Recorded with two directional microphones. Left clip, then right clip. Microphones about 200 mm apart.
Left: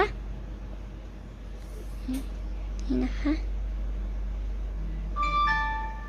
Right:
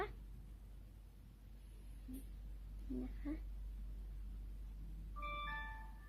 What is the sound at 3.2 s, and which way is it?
Speech, 5° left (ahead or behind).